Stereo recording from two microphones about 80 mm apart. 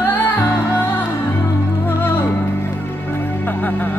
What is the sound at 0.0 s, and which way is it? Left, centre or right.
Music, left.